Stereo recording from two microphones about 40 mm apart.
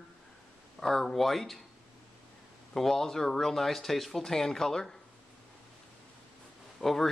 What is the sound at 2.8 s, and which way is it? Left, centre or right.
Speech, centre.